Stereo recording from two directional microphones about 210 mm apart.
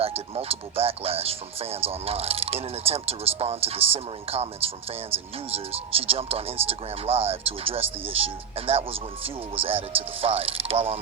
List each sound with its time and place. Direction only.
0.0 s speech: 25° right (ahead or behind)